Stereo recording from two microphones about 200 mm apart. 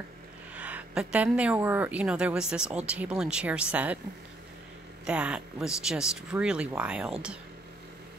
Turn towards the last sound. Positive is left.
turn(degrees=-5)  # may be behind; listen again after turning